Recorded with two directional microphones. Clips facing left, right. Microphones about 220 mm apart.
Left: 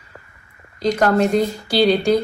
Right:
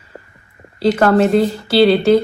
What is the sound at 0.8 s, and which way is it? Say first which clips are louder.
Speech: right 4 dB; 5° right (ahead or behind).